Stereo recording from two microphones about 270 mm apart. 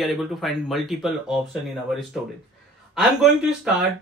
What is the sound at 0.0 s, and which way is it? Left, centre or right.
Speech, centre.